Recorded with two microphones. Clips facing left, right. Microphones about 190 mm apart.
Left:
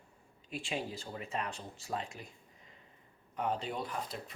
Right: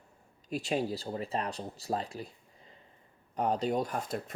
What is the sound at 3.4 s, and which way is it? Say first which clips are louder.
Speech: right 6 dB; 40° right (ahead or behind).